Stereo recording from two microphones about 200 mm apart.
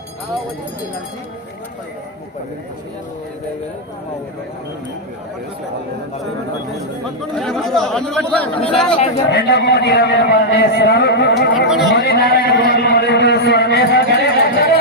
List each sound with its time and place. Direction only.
7.0 s speech: centre (ahead or behind)
9.3 s a man's voice: 55° left (ahead or behind)
11.7 s speech: centre (ahead or behind)
11.9 s a sound: 50° left (ahead or behind)